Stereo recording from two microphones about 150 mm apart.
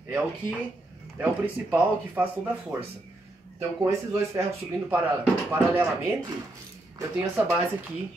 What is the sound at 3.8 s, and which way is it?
Speech, 20° right (ahead or behind).